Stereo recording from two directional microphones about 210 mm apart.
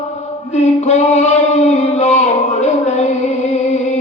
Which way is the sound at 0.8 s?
35° left (ahead or behind).